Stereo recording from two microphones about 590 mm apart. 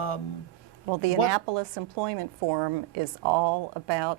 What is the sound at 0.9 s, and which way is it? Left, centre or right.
A woman's voice, right.